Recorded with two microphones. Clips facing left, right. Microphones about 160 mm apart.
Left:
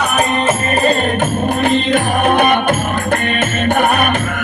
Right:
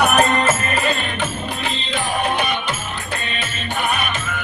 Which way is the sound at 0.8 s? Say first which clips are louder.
Left 8 dB; 50° left (ahead or behind).